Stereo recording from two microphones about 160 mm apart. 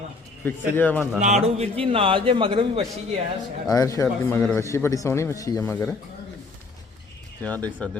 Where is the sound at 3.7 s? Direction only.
20° left (ahead or behind).